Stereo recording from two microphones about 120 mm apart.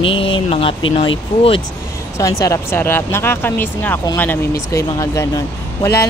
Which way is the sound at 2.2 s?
30° left (ahead or behind).